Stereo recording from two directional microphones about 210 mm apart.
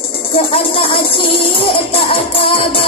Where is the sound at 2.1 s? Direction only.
25° left (ahead or behind).